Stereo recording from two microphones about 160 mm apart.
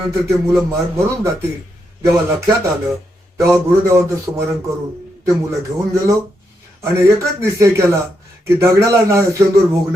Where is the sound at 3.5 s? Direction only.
15° right (ahead or behind).